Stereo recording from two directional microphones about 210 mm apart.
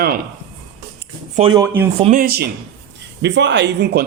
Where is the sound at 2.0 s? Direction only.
35° right (ahead or behind); by 4.0 s 55° right (ahead or behind).